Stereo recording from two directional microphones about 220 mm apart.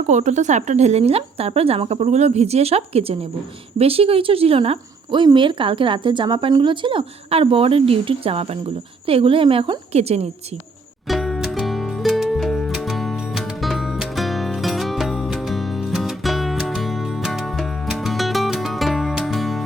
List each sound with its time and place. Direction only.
0.1 s speech: 30° right (ahead or behind)
11.1 s music: centre (ahead or behind)